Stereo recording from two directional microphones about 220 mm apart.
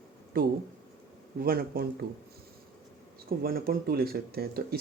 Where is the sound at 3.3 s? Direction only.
45° right (ahead or behind).